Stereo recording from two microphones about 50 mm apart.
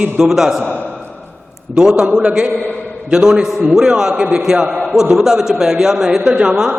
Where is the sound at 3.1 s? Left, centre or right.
Centre.